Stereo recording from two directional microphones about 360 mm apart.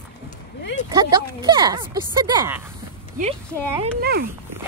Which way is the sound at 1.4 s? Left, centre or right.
Centre.